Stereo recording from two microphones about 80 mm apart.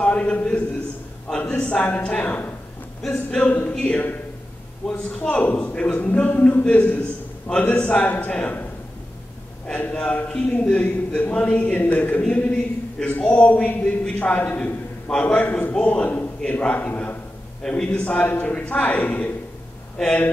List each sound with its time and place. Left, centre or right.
0.0 s a sound: centre
1.3 s speech: centre
9.8 s a man's voice: centre
18.0 s speech: left